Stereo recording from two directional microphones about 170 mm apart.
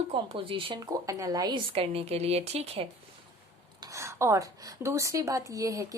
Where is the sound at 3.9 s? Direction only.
15° right (ahead or behind).